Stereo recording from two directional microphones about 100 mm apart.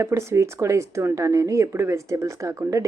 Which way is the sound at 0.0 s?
30° right (ahead or behind).